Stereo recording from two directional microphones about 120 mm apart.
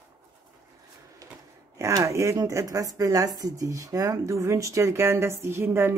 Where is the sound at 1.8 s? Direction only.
25° right (ahead or behind).